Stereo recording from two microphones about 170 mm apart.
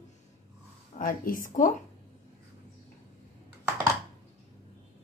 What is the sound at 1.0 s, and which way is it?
Speech, 55° left (ahead or behind).